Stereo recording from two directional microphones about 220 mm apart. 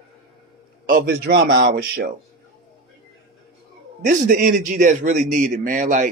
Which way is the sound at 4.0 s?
35° right (ahead or behind).